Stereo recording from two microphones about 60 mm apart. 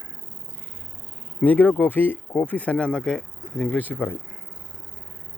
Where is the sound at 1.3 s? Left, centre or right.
Left.